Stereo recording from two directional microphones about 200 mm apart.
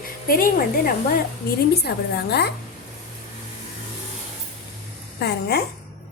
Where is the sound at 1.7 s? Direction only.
55° left (ahead or behind).